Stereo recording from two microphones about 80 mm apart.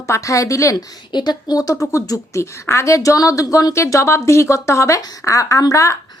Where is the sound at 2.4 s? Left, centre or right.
Left.